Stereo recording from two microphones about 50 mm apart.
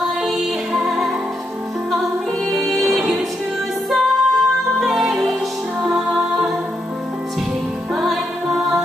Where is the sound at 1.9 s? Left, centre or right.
Centre.